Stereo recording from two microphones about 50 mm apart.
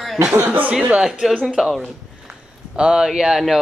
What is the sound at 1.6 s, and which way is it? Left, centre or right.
Speech, centre.